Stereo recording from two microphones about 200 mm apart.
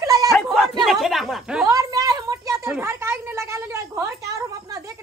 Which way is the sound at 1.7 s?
15° right (ahead or behind).